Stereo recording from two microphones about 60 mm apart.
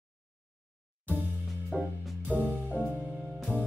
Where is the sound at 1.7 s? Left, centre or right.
Centre.